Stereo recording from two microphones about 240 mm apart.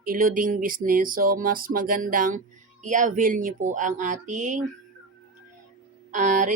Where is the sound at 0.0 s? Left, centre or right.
Right.